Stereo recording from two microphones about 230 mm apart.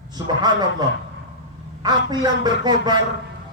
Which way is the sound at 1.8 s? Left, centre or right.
Centre.